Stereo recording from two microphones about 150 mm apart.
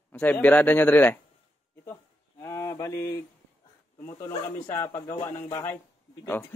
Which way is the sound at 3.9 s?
20° left (ahead or behind).